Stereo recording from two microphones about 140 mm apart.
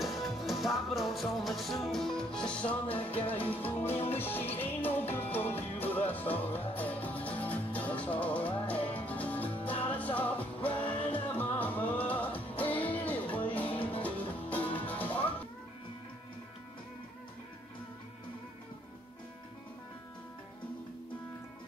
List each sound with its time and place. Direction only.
0.0 s music: centre (ahead or behind)
3.9 s music: 45° left (ahead or behind)
4.2 s music: 15° left (ahead or behind)